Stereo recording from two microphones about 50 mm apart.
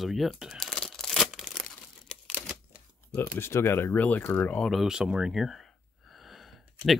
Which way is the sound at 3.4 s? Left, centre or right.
Left.